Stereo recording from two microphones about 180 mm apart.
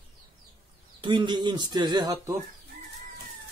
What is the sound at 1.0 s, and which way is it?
Speech, 25° right (ahead or behind).